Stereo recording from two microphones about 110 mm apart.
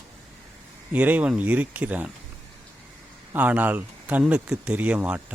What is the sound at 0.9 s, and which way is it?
Speech, 15° right (ahead or behind).